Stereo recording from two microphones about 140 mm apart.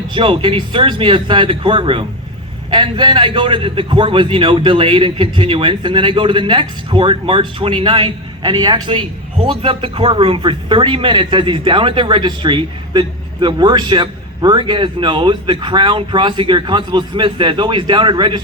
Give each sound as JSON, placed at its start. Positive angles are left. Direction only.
{"t": 0.1, "sound": "speech", "side_deg": -35}